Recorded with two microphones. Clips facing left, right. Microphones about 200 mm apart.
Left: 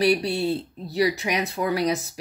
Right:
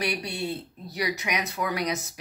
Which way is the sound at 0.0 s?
30° left (ahead or behind).